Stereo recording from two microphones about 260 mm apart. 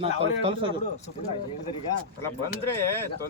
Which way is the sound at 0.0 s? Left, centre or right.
Right.